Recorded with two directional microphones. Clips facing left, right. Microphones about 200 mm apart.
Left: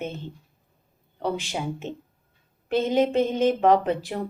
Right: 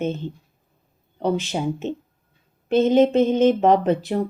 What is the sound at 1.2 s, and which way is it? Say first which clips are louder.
Speech: right 5 dB; 20° right (ahead or behind).